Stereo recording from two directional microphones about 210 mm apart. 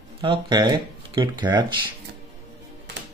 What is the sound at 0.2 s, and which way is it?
Speech, 20° right (ahead or behind).